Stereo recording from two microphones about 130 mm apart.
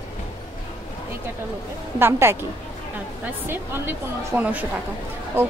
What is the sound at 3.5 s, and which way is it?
Speech, 15° right (ahead or behind).